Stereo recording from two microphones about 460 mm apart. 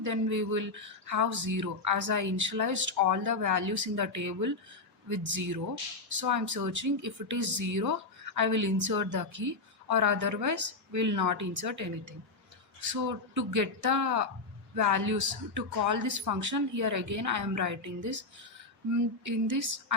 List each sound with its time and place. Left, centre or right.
0.0 s speech: right